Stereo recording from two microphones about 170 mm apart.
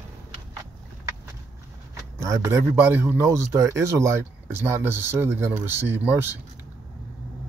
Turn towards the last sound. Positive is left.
turn(degrees=-10)  # may be behind; listen again after turning